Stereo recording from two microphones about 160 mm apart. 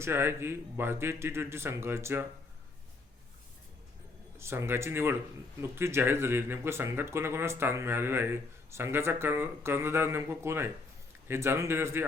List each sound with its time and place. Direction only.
0.0 s speech: 15° right (ahead or behind)
4.4 s speech: 15° right (ahead or behind)